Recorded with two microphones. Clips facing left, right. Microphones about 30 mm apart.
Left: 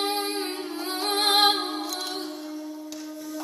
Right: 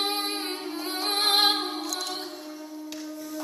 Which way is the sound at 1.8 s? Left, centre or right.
Centre.